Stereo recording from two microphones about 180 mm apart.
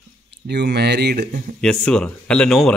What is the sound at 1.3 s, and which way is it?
Speech, 45° right (ahead or behind).